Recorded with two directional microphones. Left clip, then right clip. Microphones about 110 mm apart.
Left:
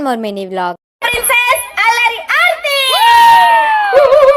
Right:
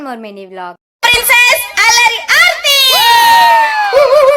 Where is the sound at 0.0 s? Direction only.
90° left.